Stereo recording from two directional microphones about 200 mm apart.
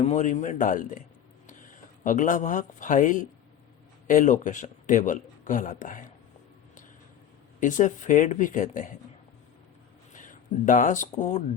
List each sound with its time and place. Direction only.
0.0 s speech: 35° left (ahead or behind)
2.0 s a man's voice: 40° left (ahead or behind)
7.6 s speech: 40° left (ahead or behind)
10.1 s a sound: 40° left (ahead or behind)
11.2 s speech: 35° left (ahead or behind)